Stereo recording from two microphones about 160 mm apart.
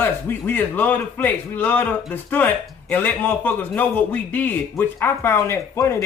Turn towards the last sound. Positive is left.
turn(degrees=20)  # may be behind; listen again after turning